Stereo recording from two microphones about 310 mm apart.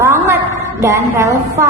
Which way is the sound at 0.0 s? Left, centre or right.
Centre.